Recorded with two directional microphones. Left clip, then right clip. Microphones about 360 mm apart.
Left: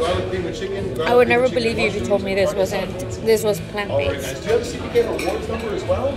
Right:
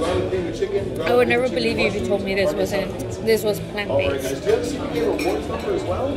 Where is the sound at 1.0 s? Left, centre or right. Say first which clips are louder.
Left 3 dB; centre.